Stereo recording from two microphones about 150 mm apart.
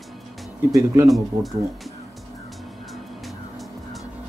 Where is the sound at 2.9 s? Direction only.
Centre (ahead or behind).